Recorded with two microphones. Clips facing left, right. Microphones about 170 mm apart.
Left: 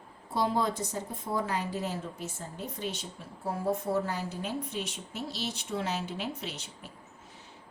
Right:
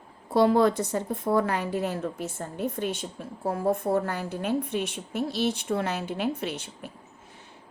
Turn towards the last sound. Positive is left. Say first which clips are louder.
# right 8 dB
turn(degrees=-55)  # may be behind; listen again after turning